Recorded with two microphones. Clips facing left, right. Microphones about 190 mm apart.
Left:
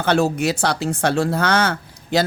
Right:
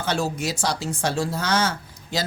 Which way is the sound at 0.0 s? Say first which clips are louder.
Left 7 dB; 60° left (ahead or behind).